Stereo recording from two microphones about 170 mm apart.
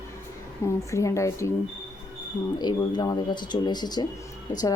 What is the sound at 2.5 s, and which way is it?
Speech, 25° left (ahead or behind).